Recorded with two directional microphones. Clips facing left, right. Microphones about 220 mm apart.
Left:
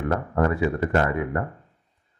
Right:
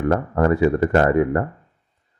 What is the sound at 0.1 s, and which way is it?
Speech, 45° right (ahead or behind).